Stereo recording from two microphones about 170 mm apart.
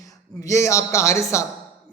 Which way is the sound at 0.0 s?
20° left (ahead or behind).